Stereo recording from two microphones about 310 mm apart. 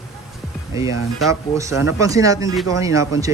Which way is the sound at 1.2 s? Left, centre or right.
Centre.